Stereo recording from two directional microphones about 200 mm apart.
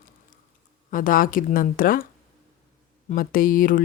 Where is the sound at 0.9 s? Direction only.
45° left (ahead or behind).